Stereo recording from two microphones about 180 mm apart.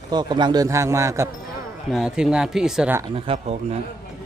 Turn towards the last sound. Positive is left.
turn(degrees=-35)  # may be behind; listen again after turning